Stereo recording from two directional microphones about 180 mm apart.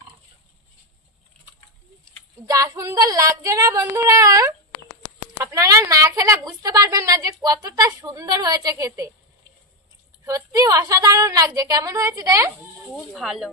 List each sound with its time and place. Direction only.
2.4 s a woman's voice: 20° right (ahead or behind)
10.2 s a woman's voice: 20° right (ahead or behind)
13.1 s speech: centre (ahead or behind)